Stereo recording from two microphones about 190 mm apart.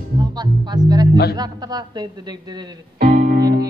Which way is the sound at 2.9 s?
55° right (ahead or behind).